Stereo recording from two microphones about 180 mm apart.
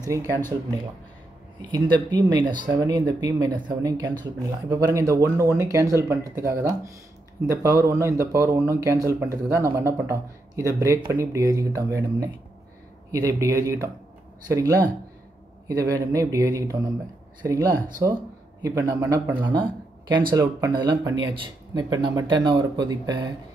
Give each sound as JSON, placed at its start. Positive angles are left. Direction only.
{"t": 1.6, "sound": "speech", "side_deg": -25}
{"t": 19.5, "sound": "speech", "side_deg": -25}